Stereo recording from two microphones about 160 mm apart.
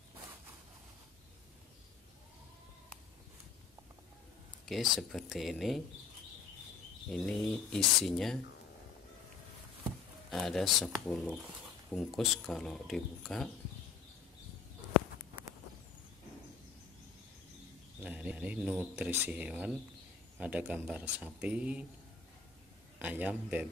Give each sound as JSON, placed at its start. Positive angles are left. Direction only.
{"t": 4.6, "sound": "speech", "side_deg": 0}
{"t": 7.1, "sound": "speech", "side_deg": 5}
{"t": 10.3, "sound": "speech", "side_deg": 0}
{"t": 18.0, "sound": "a man's voice", "side_deg": -10}
{"t": 22.9, "sound": "a man's voice", "side_deg": -10}